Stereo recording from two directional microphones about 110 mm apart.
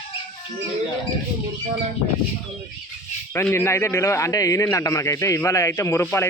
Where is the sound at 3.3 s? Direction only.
20° left (ahead or behind).